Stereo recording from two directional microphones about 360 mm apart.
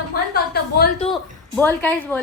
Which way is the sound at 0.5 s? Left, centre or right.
Left.